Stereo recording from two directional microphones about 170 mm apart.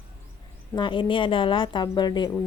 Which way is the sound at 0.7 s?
25° left (ahead or behind).